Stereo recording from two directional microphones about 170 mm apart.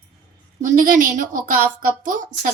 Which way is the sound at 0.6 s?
50° right (ahead or behind).